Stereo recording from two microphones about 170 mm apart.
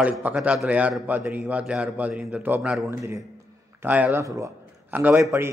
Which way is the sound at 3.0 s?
15° right (ahead or behind).